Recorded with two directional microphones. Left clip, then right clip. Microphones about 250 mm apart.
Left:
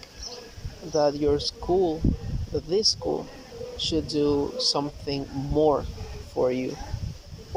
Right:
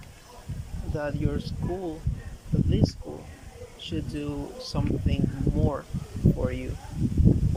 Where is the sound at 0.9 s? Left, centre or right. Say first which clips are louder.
Left 9 dB; centre.